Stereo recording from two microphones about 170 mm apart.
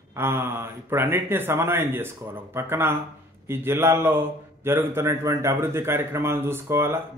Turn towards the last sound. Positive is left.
turn(degrees=-15)  # may be behind; listen again after turning